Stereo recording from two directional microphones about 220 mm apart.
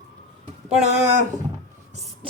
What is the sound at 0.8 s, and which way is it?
Speech, 30° right (ahead or behind).